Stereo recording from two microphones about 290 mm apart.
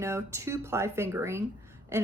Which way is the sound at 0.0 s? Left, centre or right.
Centre.